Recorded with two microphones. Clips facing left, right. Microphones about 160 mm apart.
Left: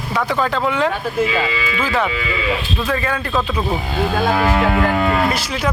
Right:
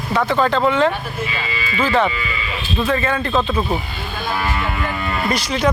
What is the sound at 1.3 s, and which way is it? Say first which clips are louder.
Cattle: left 6 dB; 90° left.